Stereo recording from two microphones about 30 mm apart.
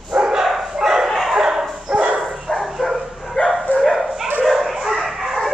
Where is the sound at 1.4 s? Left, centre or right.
Centre.